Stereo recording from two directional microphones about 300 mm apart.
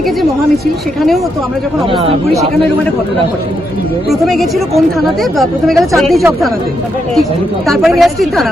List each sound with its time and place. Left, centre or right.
4.1 s speech: centre
7.7 s speech: centre